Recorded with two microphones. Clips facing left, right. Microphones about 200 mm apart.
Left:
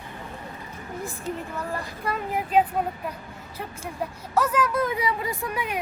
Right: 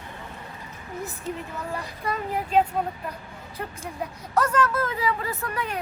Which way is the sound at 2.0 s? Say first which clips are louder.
Even; 5° left (ahead or behind).